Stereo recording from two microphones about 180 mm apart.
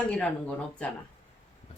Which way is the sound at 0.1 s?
5° left (ahead or behind).